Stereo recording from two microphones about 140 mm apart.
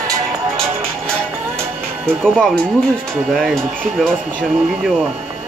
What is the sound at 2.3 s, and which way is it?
Speech, 5° left (ahead or behind).